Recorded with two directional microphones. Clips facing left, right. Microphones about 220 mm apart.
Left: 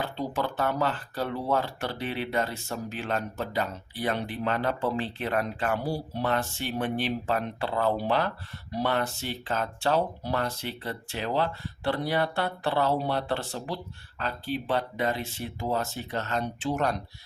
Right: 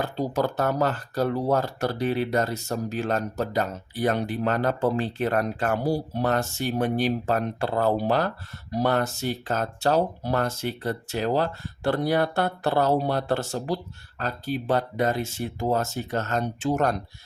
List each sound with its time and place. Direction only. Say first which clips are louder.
0.0 s speech: right 5 dB; 40° right (ahead or behind)